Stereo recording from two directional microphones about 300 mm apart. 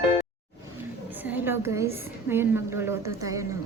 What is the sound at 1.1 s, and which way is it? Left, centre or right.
A woman's voice, centre.